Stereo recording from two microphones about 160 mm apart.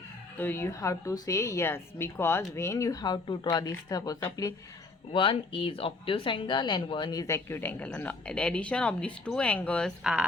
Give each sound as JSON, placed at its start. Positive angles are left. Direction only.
{"t": 0.3, "sound": "speech", "side_deg": 10}
{"t": 5.1, "sound": "speech", "side_deg": 35}
{"t": 10.0, "sound": "speech", "side_deg": -5}